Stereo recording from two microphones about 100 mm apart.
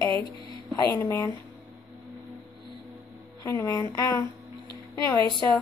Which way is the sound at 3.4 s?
30° left (ahead or behind).